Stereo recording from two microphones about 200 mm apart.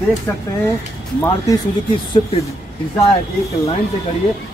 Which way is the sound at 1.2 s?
15° left (ahead or behind).